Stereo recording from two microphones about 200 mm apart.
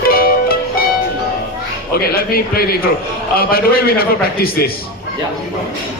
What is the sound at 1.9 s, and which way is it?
A man's voice, 50° left (ahead or behind).